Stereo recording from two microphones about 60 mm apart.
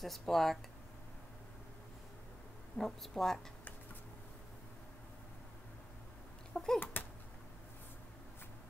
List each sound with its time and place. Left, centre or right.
0.0 s speech: centre
2.8 s speech: centre
6.5 s babbling: centre
6.8 s a sound: left